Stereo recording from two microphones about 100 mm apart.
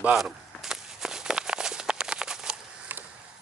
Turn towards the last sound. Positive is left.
turn(degrees=-20)  # may be behind; listen again after turning